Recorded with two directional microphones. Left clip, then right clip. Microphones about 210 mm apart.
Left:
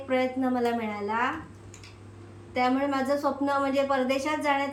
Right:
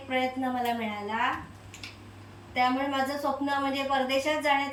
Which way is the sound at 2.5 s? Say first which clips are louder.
Left 1 dB; 15° left (ahead or behind).